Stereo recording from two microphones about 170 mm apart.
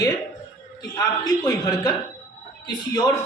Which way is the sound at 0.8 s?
20° left (ahead or behind).